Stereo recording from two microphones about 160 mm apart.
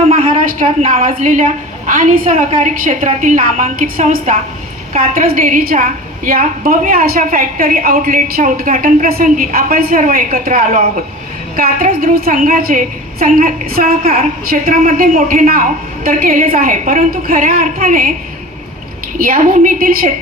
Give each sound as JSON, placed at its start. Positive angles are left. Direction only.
{"t": 0.1, "sound": "a woman's voice", "side_deg": -55}
{"t": 19.2, "sound": "a woman's voice", "side_deg": -60}